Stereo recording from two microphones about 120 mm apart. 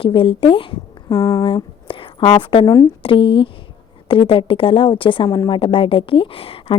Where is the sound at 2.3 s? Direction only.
45° left (ahead or behind).